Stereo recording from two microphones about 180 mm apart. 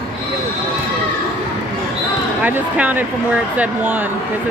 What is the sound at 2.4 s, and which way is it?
Speech, 10° right (ahead or behind).